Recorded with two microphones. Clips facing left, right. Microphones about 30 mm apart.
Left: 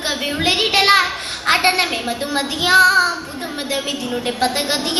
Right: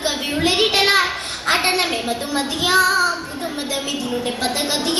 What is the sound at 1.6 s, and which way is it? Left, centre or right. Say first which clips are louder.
Speech: left 2 dB; left.